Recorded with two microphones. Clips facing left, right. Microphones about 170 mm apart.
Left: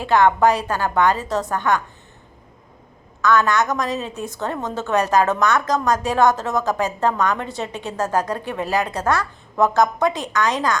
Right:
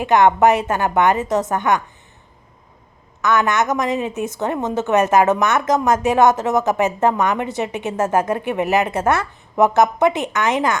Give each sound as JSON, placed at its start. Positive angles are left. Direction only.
{"t": 0.0, "sound": "a woman's voice", "side_deg": -20}
{"t": 3.2, "sound": "a woman's voice", "side_deg": -20}